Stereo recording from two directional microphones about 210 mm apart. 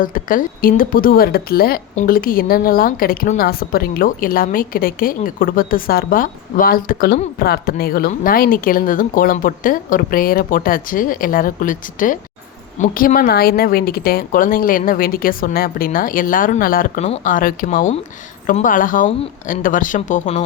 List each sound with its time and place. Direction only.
0.0 s a woman's voice: 40° left (ahead or behind)